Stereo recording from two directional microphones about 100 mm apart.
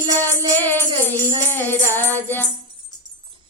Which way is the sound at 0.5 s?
20° left (ahead or behind).